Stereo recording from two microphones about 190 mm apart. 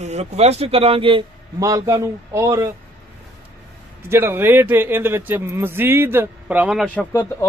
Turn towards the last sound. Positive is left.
turn(degrees=15)  # may be behind; listen again after turning